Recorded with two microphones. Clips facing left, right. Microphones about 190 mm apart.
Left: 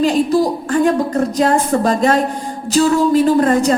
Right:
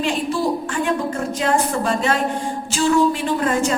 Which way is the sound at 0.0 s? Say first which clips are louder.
Left 7 dB; 40° left (ahead or behind).